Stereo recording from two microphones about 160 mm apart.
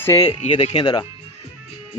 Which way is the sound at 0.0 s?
20° left (ahead or behind).